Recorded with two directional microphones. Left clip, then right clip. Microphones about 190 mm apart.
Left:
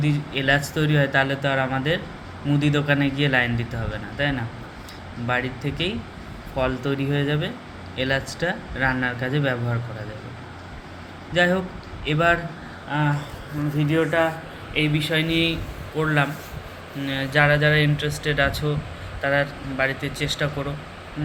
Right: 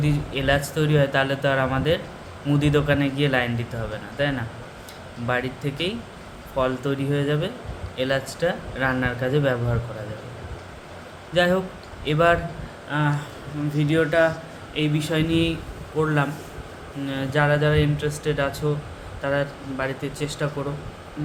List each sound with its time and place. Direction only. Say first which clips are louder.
0.0 s speech: left 1 dB; 15° right (ahead or behind)
11.3 s speech: even; 15° right (ahead or behind)